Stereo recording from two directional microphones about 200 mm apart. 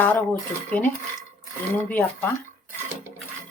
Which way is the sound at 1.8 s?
10° left (ahead or behind).